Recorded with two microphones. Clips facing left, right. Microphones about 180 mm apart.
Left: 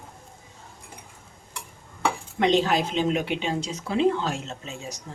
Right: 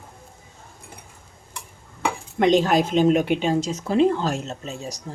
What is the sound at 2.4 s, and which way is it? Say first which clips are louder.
Speech: right 4 dB; 45° right (ahead or behind).